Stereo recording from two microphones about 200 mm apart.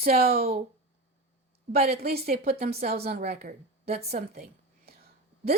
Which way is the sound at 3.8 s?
30° right (ahead or behind).